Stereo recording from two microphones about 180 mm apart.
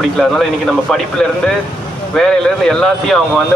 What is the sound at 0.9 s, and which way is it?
Speech, 5° left (ahead or behind).